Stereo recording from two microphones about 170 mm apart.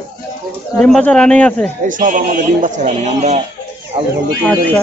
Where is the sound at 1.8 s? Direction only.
50° right (ahead or behind).